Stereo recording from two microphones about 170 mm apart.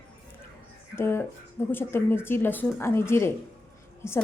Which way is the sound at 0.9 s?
15° left (ahead or behind).